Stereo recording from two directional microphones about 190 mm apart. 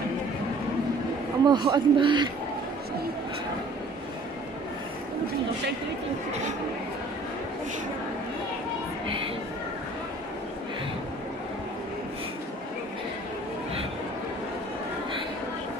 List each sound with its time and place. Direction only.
1.4 s a man's voice: 20° right (ahead or behind)
9.0 s music: 30° right (ahead or behind)